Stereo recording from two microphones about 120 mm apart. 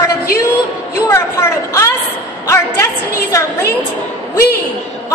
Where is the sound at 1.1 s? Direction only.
25° left (ahead or behind).